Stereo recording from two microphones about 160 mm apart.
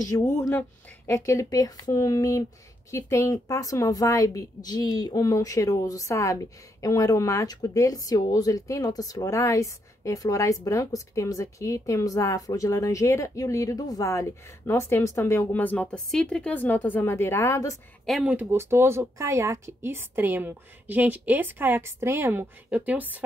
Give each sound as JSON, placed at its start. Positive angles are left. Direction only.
{"t": 0.0, "sound": "a woman's voice", "side_deg": 20}
{"t": 18.0, "sound": "speech", "side_deg": -5}